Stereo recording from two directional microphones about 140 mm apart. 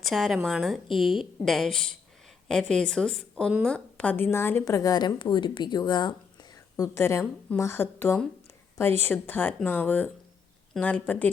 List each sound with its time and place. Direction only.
0.0 s a woman's voice: centre (ahead or behind); by 6.1 s 30° left (ahead or behind)
6.7 s speech: 20° left (ahead or behind)